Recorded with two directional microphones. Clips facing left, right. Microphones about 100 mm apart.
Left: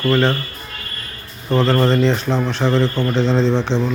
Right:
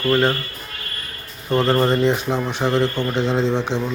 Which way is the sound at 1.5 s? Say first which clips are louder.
Left 2 dB; 15° right (ahead or behind).